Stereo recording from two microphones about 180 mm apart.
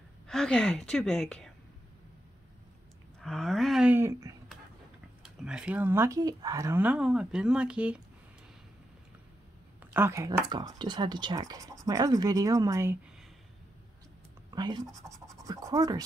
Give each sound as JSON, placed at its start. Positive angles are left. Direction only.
{"t": 0.3, "sound": "a woman's voice", "side_deg": 5}
{"t": 3.2, "sound": "speech", "side_deg": 0}
{"t": 5.2, "sound": "speech", "side_deg": -5}
{"t": 9.8, "sound": "speech", "side_deg": -15}
{"t": 14.5, "sound": "speech", "side_deg": -20}